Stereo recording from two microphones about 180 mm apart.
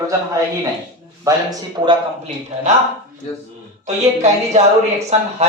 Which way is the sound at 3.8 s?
40° right (ahead or behind).